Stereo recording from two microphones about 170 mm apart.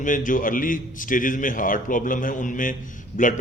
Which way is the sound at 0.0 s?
50° left (ahead or behind).